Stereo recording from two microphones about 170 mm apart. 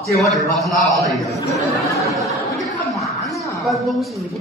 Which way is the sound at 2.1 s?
Centre (ahead or behind).